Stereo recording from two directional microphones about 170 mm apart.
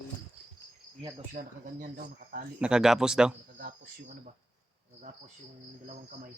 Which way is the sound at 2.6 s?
5° right (ahead or behind).